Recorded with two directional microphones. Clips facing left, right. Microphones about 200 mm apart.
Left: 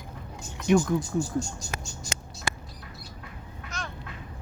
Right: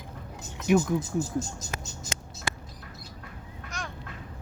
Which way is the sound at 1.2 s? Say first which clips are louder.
Left 1 dB; 20° right (ahead or behind).